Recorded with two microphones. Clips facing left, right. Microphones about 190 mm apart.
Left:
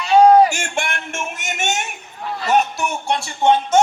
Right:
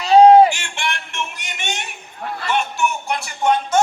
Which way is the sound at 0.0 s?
30° right (ahead or behind).